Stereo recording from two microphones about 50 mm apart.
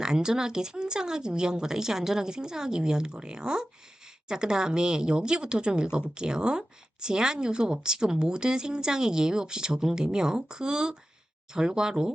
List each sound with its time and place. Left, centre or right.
0.0 s speech: centre